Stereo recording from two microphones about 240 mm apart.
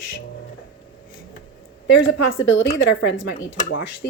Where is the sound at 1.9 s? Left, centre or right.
Left.